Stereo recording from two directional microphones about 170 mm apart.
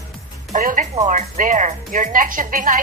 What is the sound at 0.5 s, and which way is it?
Speech, 50° right (ahead or behind).